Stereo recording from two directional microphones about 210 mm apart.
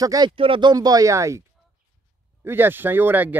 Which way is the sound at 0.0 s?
20° right (ahead or behind).